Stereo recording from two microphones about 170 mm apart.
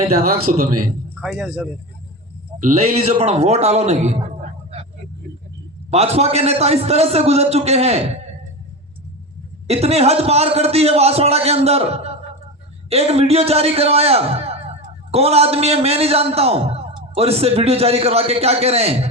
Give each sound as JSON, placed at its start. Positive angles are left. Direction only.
{"t": 0.5, "sound": "a man's voice", "side_deg": -50}
{"t": 1.2, "sound": "speech", "side_deg": 0}
{"t": 2.6, "sound": "a man's voice", "side_deg": -45}
{"t": 4.7, "sound": "vehicle", "side_deg": -35}
{"t": 5.9, "sound": "a man's voice", "side_deg": -40}
{"t": 9.6, "sound": "a man's voice", "side_deg": -40}